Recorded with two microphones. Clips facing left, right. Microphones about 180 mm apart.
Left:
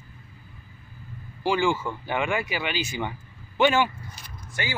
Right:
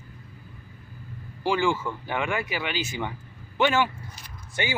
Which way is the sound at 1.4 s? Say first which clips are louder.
Left 1 dB; centre (ahead or behind).